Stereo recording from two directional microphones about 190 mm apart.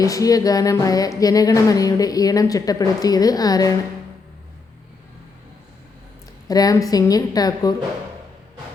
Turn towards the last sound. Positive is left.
turn(degrees=20)  # may be behind; listen again after turning